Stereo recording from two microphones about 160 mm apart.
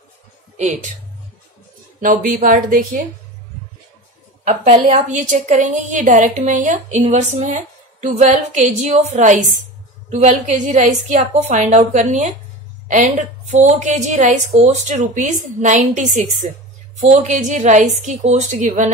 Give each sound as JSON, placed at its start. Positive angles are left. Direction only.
{"t": 0.6, "sound": "a woman's voice", "side_deg": -45}
{"t": 2.0, "sound": "a woman's voice", "side_deg": -60}
{"t": 4.5, "sound": "a woman's voice", "side_deg": -40}